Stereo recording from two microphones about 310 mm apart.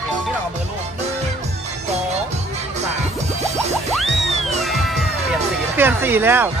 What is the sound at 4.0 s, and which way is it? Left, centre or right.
Music, centre.